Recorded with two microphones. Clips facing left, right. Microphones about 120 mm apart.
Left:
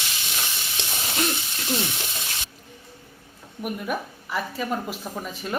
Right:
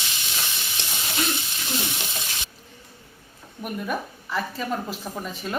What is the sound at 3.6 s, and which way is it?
A woman's voice, 10° left (ahead or behind).